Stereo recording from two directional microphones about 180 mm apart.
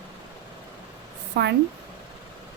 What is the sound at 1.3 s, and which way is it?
Speech, 70° right (ahead or behind).